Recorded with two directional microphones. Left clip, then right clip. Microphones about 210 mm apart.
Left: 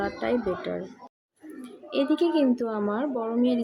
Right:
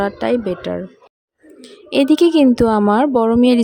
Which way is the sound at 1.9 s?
50° right (ahead or behind).